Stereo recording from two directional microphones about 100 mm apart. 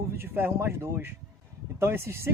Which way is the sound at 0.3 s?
25° right (ahead or behind).